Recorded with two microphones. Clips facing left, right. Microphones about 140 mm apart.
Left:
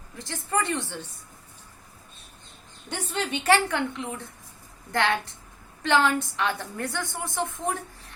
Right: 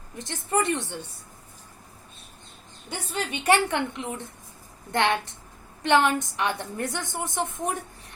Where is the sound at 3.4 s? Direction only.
20° right (ahead or behind).